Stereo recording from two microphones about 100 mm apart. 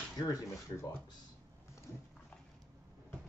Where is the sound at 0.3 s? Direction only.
35° left (ahead or behind).